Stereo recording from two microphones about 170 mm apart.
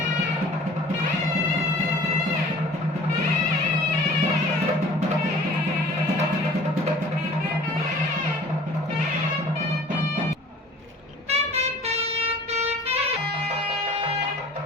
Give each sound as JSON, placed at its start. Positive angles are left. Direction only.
{"t": 11.3, "sound": "music", "side_deg": -40}